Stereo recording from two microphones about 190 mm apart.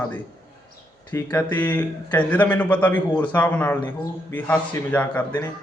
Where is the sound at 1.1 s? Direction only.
10° left (ahead or behind).